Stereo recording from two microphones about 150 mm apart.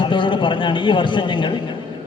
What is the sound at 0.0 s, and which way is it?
A man's voice, 35° left (ahead or behind).